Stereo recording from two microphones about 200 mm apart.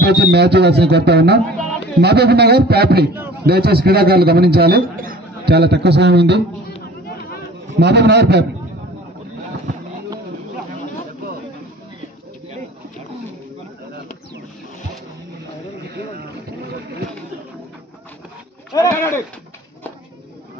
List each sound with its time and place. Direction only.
0.0 s a man's voice: 55° right (ahead or behind)
7.8 s speech: 55° right (ahead or behind)
18.7 s a sound: 15° left (ahead or behind)